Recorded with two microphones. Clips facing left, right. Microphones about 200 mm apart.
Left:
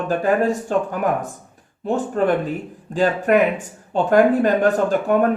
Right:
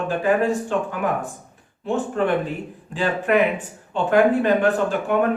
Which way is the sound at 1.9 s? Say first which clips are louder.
Left 2 dB; 40° left (ahead or behind).